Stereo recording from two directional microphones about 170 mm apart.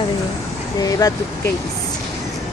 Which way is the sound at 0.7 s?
20° left (ahead or behind).